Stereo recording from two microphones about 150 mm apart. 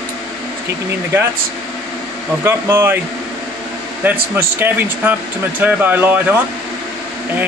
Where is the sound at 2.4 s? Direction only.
20° right (ahead or behind).